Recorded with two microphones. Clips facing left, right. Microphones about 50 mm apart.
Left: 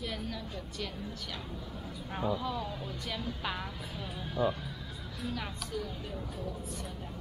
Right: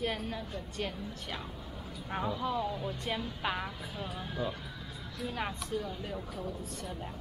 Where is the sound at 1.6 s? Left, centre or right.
Centre.